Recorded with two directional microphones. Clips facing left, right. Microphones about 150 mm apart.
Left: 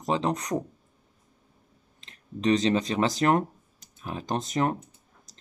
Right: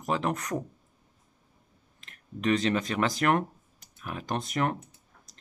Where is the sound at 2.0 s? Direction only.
25° left (ahead or behind).